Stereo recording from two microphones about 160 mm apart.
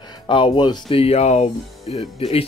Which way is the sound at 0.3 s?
30° left (ahead or behind).